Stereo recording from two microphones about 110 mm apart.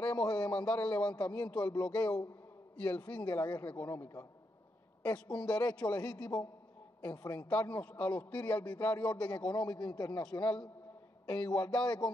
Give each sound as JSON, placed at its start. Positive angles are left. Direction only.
{"t": 0.4, "sound": "a man's voice", "side_deg": 10}
{"t": 7.0, "sound": "a man's voice", "side_deg": 15}
{"t": 9.5, "sound": "a man's voice", "side_deg": 40}
{"t": 10.4, "sound": "a man's voice", "side_deg": 10}
{"t": 11.8, "sound": "a man's voice", "side_deg": 40}